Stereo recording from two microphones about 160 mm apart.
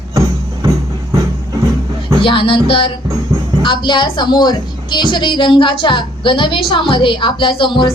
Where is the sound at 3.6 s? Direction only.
30° left (ahead or behind).